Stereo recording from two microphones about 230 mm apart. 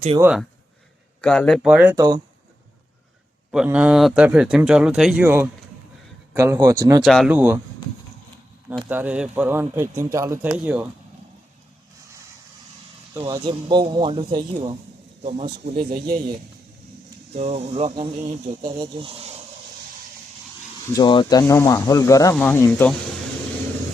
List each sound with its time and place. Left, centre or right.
0.2 s speech: centre
3.5 s a man's voice: centre
7.0 s speech: centre
8.7 s a man's voice: centre
13.1 s speech: centre
17.3 s speech: right
20.9 s speech: centre